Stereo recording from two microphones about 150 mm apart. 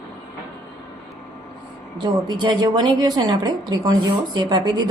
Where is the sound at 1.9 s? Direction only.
30° right (ahead or behind).